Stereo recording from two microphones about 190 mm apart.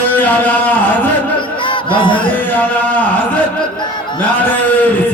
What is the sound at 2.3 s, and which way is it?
A man's voice, 10° left (ahead or behind).